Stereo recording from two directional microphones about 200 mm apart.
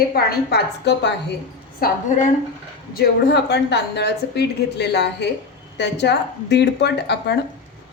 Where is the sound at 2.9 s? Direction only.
55° left (ahead or behind).